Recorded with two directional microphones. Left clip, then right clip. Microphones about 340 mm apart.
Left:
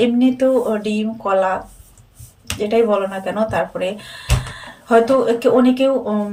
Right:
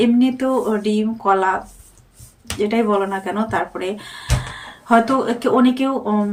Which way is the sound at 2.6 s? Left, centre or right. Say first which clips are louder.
Left 2 dB; centre.